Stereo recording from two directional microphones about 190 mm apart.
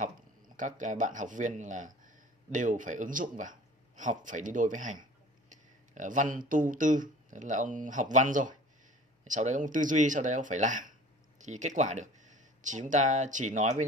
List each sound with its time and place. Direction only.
0.6 s speech: 40° right (ahead or behind)
5.9 s speech: 40° right (ahead or behind)